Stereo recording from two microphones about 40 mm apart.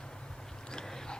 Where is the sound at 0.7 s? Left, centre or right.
Centre.